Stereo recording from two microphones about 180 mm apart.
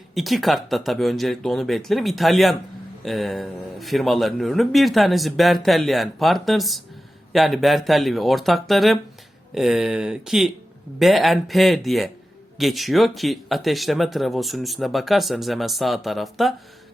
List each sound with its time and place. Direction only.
0.1 s speech: centre (ahead or behind)